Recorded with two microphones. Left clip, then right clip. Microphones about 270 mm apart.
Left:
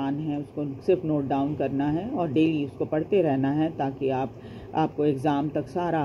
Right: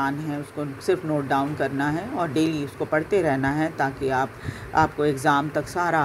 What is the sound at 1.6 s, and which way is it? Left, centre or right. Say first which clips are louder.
Speech: right 2 dB; right.